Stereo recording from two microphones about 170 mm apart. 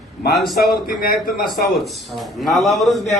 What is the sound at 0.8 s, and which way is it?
Speech, 60° left (ahead or behind).